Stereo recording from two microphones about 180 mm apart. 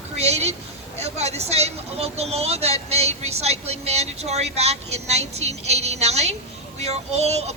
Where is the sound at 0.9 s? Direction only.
35° right (ahead or behind).